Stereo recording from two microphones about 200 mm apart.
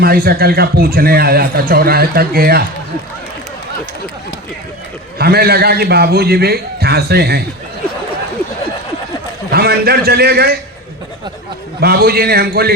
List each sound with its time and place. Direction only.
0.0 s a man's voice: 50° right (ahead or behind)
5.1 s a man's voice: 50° right (ahead or behind)
9.5 s a man's voice: 50° right (ahead or behind)
11.8 s a man's voice: 50° right (ahead or behind)